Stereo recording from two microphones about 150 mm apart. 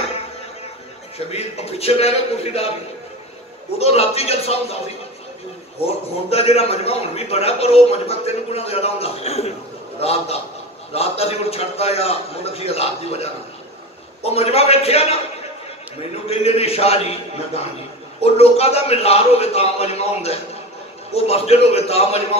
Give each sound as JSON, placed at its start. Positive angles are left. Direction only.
{"t": 1.1, "sound": "a man's voice", "side_deg": 45}
{"t": 3.7, "sound": "a man's voice", "side_deg": 45}
{"t": 5.9, "sound": "a man's voice", "side_deg": 45}